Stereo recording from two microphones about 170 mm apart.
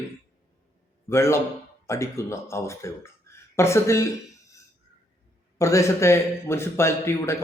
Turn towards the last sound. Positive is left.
turn(degrees=15)  # may be behind; listen again after turning